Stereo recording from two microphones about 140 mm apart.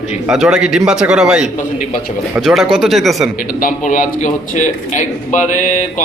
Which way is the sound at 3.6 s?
75° left (ahead or behind).